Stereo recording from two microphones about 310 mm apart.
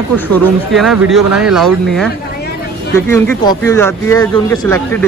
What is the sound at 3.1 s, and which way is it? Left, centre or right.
Speech, centre.